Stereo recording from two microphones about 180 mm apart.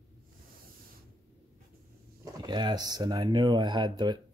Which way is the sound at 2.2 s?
25° right (ahead or behind).